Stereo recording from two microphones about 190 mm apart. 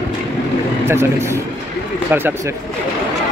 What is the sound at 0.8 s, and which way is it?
Speech, 15° right (ahead or behind).